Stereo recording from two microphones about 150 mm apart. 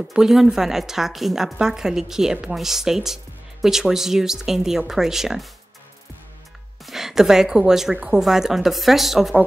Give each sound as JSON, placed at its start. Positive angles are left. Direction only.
{"t": 0.1, "sound": "a woman's voice", "side_deg": -5}
{"t": 6.9, "sound": "a woman's voice", "side_deg": 0}